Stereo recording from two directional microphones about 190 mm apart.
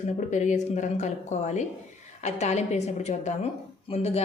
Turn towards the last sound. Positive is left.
turn(degrees=35)  # may be behind; listen again after turning